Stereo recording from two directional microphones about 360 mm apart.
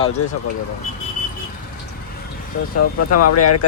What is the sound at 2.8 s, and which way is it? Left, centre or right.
Speech, left.